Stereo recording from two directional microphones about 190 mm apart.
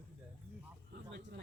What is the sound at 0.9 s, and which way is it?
Speech, 60° right (ahead or behind).